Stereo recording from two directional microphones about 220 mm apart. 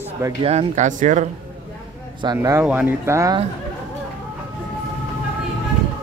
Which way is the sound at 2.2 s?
15° right (ahead or behind).